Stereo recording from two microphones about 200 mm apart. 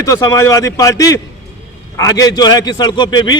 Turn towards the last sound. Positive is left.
turn(degrees=20)  # may be behind; listen again after turning